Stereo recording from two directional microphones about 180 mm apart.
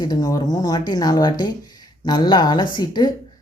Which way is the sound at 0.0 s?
20° left (ahead or behind).